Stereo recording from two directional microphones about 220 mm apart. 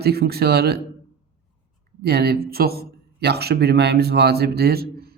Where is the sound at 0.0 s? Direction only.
45° right (ahead or behind).